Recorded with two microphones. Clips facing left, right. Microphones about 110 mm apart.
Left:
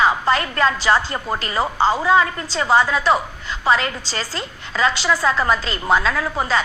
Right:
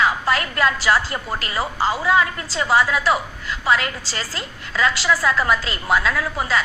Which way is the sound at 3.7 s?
30° left (ahead or behind).